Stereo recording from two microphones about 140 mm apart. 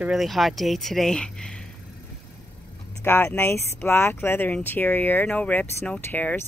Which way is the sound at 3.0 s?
15° left (ahead or behind).